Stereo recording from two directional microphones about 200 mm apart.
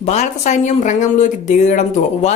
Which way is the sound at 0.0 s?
35° left (ahead or behind).